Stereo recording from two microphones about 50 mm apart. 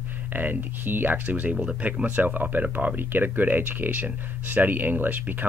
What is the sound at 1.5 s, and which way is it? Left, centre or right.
Speech, centre.